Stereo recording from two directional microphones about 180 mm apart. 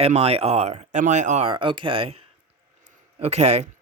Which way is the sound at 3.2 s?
35° right (ahead or behind).